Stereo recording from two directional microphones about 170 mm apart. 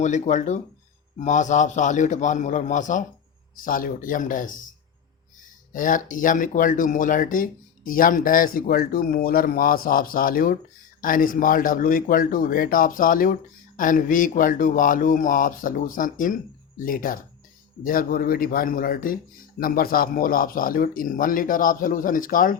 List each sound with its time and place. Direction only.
0.0 s speech: 45° left (ahead or behind)
5.7 s speech: 50° left (ahead or behind)